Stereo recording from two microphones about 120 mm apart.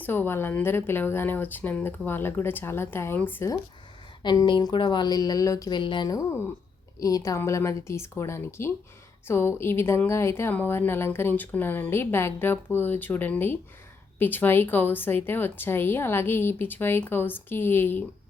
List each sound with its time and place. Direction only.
0.0 s speech: 15° left (ahead or behind)
4.2 s a woman's voice: 40° left (ahead or behind); by 18.0 s 15° left (ahead or behind)